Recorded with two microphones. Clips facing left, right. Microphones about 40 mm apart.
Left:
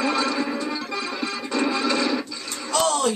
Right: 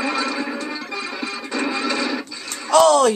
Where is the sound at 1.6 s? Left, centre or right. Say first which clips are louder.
Even; centre.